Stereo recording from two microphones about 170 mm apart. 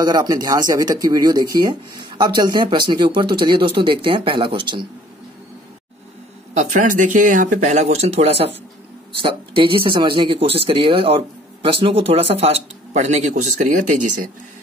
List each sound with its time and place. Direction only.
0.0 s speech: 25° right (ahead or behind)
6.5 s speech: 45° right (ahead or behind)